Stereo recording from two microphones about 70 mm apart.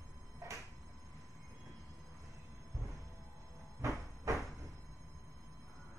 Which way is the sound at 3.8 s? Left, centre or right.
Right.